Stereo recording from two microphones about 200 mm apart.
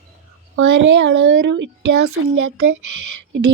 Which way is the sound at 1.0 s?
65° right (ahead or behind).